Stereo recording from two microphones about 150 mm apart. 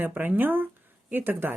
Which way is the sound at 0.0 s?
15° right (ahead or behind).